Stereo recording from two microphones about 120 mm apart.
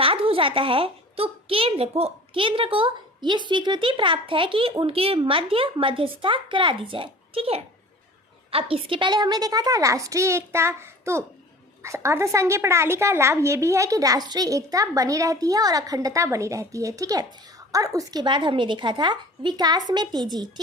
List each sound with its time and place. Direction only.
0.0 s a child's voice: 50° right (ahead or behind); by 20.5 s 35° right (ahead or behind)